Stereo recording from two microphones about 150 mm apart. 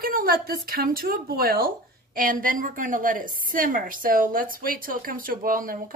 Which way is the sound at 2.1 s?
70° right (ahead or behind).